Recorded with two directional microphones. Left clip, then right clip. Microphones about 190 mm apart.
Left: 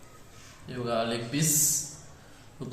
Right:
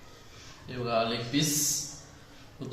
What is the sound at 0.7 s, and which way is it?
Speech, 20° left (ahead or behind).